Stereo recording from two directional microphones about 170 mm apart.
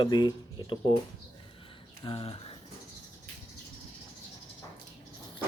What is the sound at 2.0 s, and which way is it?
Speech, 30° left (ahead or behind).